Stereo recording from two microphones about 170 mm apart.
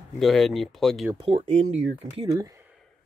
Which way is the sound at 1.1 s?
30° right (ahead or behind).